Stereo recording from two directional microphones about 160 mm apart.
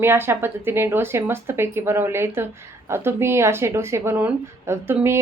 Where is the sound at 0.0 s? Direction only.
15° right (ahead or behind).